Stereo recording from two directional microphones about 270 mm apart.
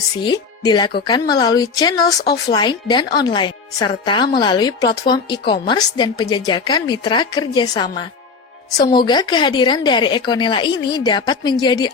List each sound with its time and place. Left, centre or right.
0.2 s speech: centre